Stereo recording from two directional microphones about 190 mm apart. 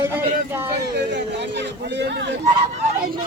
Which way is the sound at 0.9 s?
65° right (ahead or behind).